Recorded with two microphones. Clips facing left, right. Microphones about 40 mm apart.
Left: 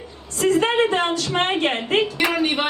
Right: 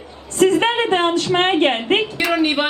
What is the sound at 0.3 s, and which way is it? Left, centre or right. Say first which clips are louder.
A woman's voice: right 3 dB; right.